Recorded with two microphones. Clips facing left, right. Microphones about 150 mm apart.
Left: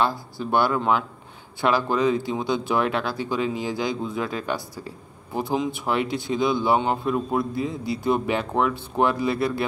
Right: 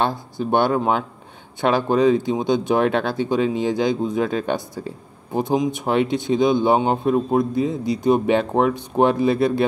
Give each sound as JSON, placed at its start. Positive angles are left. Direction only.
{"t": 0.0, "sound": "speech", "side_deg": -20}